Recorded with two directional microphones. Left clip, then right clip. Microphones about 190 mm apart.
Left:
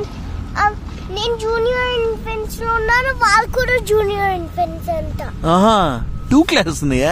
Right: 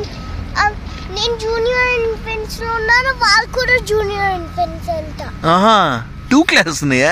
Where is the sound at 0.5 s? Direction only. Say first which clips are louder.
Right 1 dB; 30° left (ahead or behind).